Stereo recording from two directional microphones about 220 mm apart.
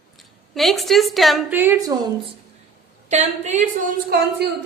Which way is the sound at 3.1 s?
30° right (ahead or behind).